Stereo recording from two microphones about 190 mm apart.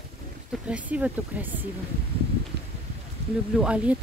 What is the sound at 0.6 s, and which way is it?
Speech, 5° right (ahead or behind).